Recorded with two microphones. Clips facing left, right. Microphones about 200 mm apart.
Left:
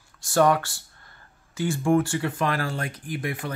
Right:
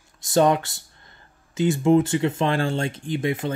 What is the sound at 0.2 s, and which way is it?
Speech, 20° right (ahead or behind).